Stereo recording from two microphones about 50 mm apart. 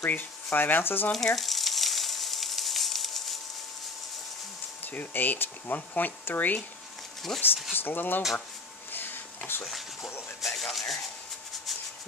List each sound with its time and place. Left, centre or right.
0.0 s speech: left
1.1 s frying: centre
4.8 s speech: left
7.3 s speech: centre
7.7 s speech: left
8.9 s wheeze: left
9.7 s speech: centre
10.4 s rub: centre